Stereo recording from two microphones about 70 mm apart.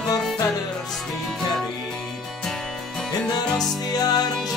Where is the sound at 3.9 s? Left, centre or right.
Left.